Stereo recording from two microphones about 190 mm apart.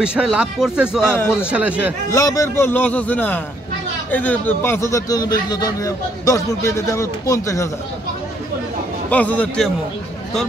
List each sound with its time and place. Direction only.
0.0 s speech: 5° right (ahead or behind)
1.0 s speech: 10° left (ahead or behind)
1.5 s speech: 5° right (ahead or behind)
2.0 s speech: 20° left (ahead or behind)
9.1 s speech: 10° left (ahead or behind)